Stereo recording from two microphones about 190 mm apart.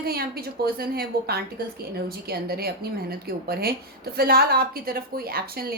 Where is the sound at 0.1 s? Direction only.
55° right (ahead or behind).